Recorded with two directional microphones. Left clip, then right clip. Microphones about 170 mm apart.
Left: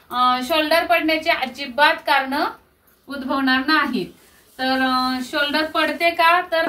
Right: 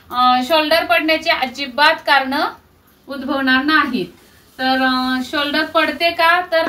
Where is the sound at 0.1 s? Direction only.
15° right (ahead or behind).